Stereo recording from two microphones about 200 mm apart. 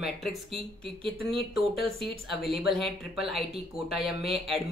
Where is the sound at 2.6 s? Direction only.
Centre (ahead or behind).